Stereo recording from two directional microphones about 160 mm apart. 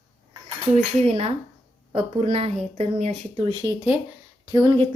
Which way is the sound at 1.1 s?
40° right (ahead or behind).